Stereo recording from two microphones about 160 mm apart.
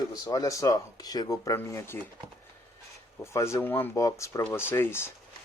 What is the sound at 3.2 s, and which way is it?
Speech, 15° left (ahead or behind).